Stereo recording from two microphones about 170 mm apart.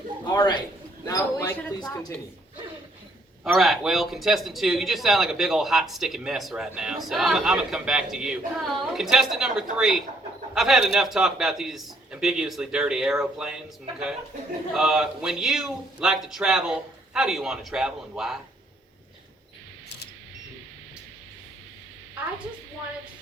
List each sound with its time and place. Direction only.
0.3 s a man's voice: 25° left (ahead or behind)
3.4 s speech: centre (ahead or behind)
14.7 s speech: 5° right (ahead or behind)